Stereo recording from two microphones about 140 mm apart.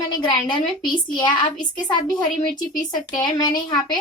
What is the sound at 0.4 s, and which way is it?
Speech, 35° left (ahead or behind).